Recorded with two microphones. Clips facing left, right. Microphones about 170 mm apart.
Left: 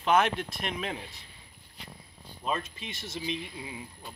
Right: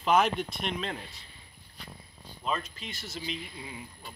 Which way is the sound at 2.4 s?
20° left (ahead or behind).